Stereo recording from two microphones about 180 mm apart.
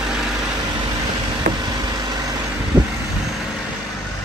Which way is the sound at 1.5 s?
45° right (ahead or behind).